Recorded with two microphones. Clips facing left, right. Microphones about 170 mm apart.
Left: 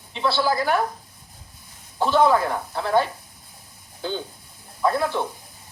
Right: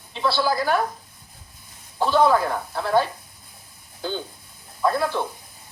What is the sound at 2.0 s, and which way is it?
Speech, centre (ahead or behind).